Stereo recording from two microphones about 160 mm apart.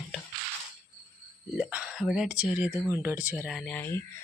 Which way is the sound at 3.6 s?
10° left (ahead or behind).